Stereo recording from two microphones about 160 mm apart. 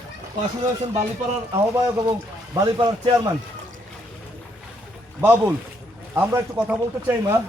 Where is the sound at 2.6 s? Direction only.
25° right (ahead or behind).